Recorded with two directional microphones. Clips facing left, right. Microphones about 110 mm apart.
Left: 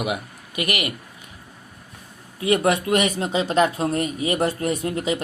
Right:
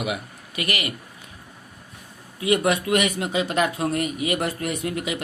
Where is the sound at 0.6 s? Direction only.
30° right (ahead or behind).